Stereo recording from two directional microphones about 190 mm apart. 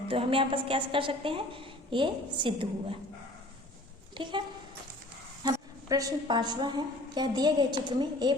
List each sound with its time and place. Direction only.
0.1 s a woman's voice: 30° right (ahead or behind)
4.2 s a woman's voice: 25° right (ahead or behind)